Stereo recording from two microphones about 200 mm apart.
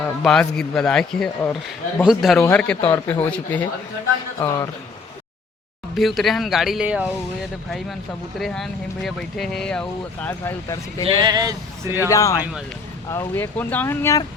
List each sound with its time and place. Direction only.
0.0 s speech: centre (ahead or behind)
5.9 s speech: centre (ahead or behind)
8.4 s speech: centre (ahead or behind)
11.0 s speech: 20° right (ahead or behind)
12.0 s speech: 15° left (ahead or behind)